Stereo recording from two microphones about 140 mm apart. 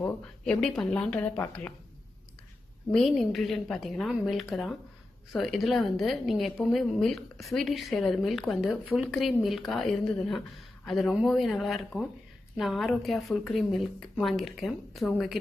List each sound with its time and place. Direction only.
0.0 s speech: 15° left (ahead or behind)
0.6 s a woman's voice: 5° left (ahead or behind)
2.9 s a woman's voice: centre (ahead or behind)